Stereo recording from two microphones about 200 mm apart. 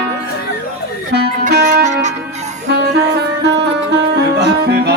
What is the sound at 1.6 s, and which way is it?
Music, 35° right (ahead or behind).